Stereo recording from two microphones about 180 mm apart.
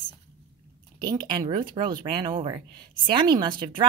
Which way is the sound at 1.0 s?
25° right (ahead or behind).